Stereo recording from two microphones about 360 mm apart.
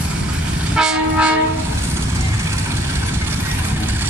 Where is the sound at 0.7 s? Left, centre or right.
Centre.